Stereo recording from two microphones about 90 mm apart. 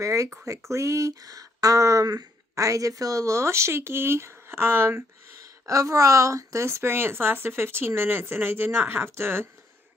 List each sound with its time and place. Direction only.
0.0 s speech: 35° right (ahead or behind)